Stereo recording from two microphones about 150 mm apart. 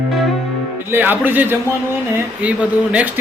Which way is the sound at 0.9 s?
15° right (ahead or behind).